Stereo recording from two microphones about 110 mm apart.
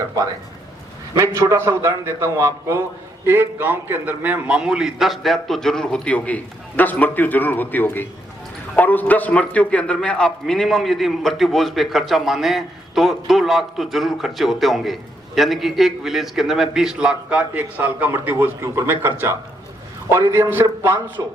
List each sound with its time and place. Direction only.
1.2 s a man's voice: 25° right (ahead or behind)